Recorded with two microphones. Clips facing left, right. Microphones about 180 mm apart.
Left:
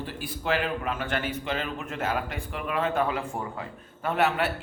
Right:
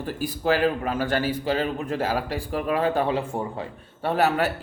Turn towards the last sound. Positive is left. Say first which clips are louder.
# right 3 dB
turn(degrees=-40)  # may be behind; listen again after turning